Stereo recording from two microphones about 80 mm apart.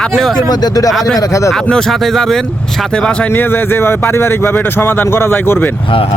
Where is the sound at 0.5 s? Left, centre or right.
Left.